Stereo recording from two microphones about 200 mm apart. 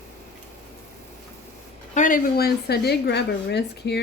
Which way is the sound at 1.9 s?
40° left (ahead or behind).